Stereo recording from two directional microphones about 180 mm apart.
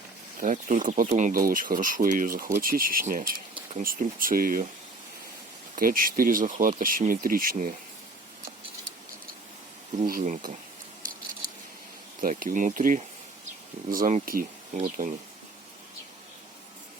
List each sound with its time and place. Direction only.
0.3 s speech: 45° right (ahead or behind)
5.7 s speech: 50° right (ahead or behind)
10.1 s speech: 50° right (ahead or behind)
12.2 s speech: 50° right (ahead or behind)